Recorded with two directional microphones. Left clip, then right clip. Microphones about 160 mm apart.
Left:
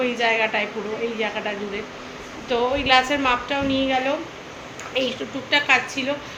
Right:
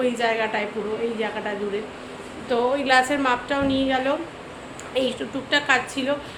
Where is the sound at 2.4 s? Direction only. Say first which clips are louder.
Left 1 dB; 15° right (ahead or behind).